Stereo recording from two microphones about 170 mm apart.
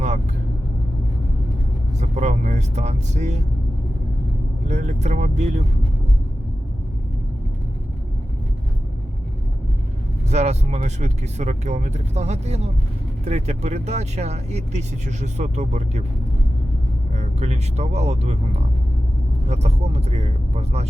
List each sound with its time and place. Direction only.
2.0 s speech: 40° right (ahead or behind)
4.7 s speech: 40° right (ahead or behind)
10.2 s speech: 40° right (ahead or behind)
17.2 s speech: 40° right (ahead or behind)